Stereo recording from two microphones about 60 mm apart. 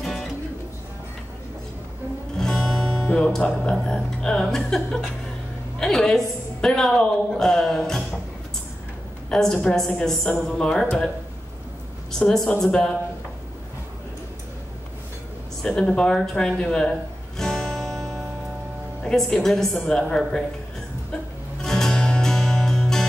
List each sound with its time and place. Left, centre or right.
0.0 s music: centre
2.3 s music: centre
3.1 s a woman's voice: centre
9.3 s a woman's voice: centre
12.1 s a woman's voice: centre
15.6 s a woman's voice: centre
17.4 s music: centre
19.0 s a woman's voice: centre
21.6 s music: centre